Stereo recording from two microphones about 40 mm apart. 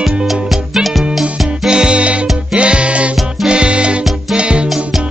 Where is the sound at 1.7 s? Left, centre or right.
Right.